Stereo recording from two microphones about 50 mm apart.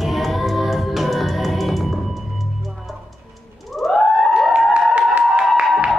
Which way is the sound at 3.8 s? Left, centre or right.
Centre.